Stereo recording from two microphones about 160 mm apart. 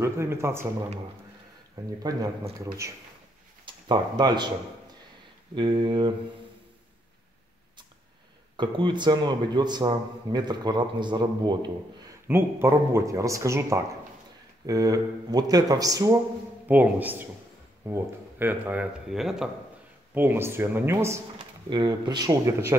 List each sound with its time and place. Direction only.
0.0 s speech: 15° right (ahead or behind)
3.6 s speech: 25° right (ahead or behind)
5.6 s speech: 30° right (ahead or behind)
8.5 s speech: 30° right (ahead or behind)
12.3 s speech: 15° right (ahead or behind)
16.6 s speech: 10° right (ahead or behind)
20.2 s speech: 15° right (ahead or behind)